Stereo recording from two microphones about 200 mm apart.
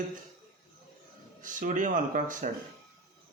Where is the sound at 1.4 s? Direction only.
40° right (ahead or behind).